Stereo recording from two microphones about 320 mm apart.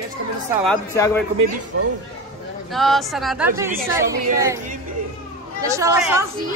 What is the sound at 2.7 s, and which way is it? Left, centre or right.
A woman's voice, centre.